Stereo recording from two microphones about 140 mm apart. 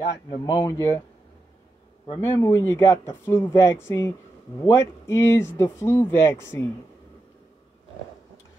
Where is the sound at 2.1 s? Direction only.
15° left (ahead or behind).